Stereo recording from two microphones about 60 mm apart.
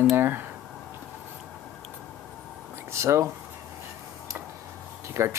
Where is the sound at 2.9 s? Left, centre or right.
Right.